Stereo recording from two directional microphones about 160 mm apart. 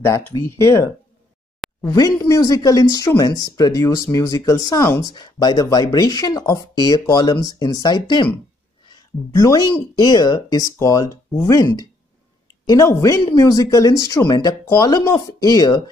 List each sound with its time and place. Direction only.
0.0 s speech: 20° left (ahead or behind)
1.8 s speech: 20° left (ahead or behind)